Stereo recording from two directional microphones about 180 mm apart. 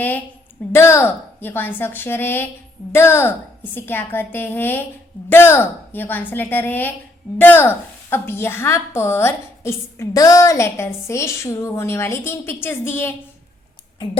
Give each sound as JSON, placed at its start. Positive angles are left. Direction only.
{"t": 0.7, "sound": "a woman's voice", "side_deg": 15}